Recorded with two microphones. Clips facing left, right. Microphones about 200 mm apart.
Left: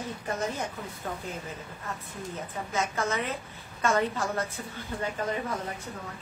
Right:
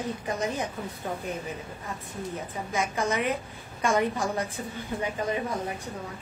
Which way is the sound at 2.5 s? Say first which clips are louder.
Even; 15° right (ahead or behind).